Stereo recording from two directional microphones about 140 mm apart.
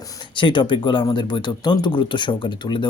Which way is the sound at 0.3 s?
35° left (ahead or behind).